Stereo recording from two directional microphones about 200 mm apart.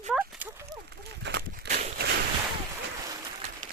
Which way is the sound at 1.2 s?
55° right (ahead or behind).